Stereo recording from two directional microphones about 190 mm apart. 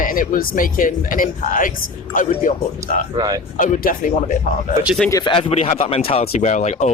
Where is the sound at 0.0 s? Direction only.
45° left (ahead or behind).